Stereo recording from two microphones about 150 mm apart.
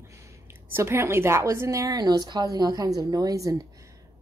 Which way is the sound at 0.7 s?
15° right (ahead or behind).